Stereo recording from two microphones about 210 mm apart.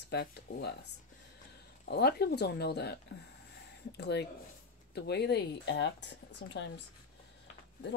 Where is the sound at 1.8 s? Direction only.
50° left (ahead or behind).